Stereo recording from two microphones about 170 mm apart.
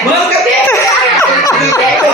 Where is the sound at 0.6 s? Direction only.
20° left (ahead or behind).